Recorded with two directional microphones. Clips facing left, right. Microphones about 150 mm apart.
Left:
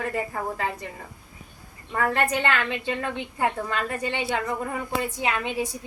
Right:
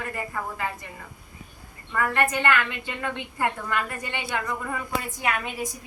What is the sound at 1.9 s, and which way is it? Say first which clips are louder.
A woman's voice: left 1 dB; 25° left (ahead or behind).